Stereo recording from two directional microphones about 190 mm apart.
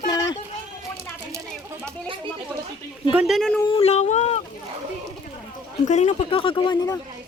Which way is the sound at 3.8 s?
35° left (ahead or behind).